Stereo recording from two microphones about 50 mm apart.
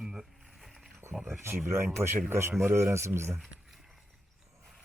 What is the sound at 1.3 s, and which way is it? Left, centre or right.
Speech, right.